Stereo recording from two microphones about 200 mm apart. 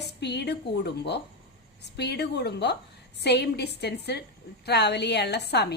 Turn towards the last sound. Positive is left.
turn(degrees=55)  # may be behind; listen again after turning